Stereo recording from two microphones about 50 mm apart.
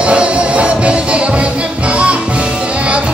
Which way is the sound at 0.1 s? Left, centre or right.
Right.